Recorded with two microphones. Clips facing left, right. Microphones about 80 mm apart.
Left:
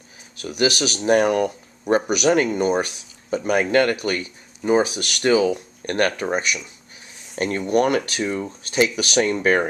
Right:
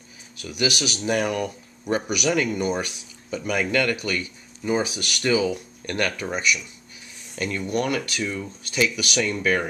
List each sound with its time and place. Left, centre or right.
0.4 s a man's voice: left
7.3 s speech: left